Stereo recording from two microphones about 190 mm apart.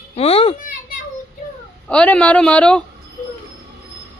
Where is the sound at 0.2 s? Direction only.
30° left (ahead or behind).